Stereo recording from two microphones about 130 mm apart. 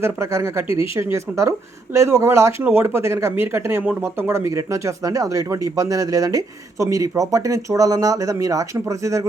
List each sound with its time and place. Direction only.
0.0 s speech: 20° right (ahead or behind)